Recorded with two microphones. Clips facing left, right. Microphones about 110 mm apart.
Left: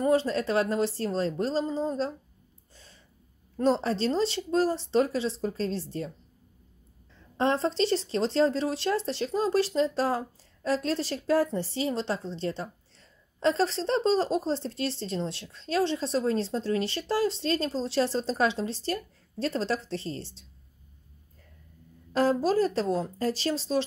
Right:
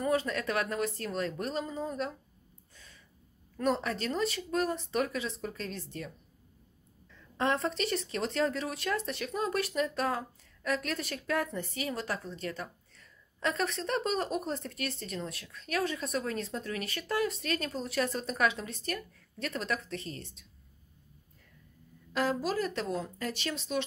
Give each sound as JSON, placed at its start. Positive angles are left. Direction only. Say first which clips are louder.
{"t": 0.0, "sound": "speech", "louder": "left 6 dB", "side_deg": 30}
{"t": 2.7, "sound": "gasp", "louder": "left 2 dB", "side_deg": 30}
{"t": 3.5, "sound": "speech", "louder": "left 5 dB", "side_deg": 30}
{"t": 7.2, "sound": "speech", "louder": "left 4 dB", "side_deg": 30}
{"t": 22.1, "sound": "speech", "louder": "left 7 dB", "side_deg": 35}